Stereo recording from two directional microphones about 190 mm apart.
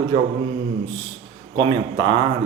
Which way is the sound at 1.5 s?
25° right (ahead or behind).